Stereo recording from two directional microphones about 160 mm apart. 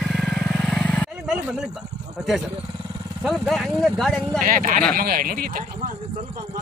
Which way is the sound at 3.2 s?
Centre (ahead or behind).